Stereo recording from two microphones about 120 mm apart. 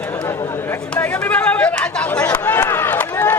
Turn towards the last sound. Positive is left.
turn(degrees=15)  # may be behind; listen again after turning